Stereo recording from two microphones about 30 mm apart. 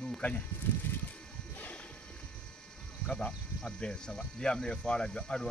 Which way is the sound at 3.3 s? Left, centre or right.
Left.